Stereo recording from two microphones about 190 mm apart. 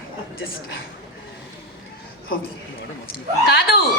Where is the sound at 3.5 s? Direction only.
55° left (ahead or behind).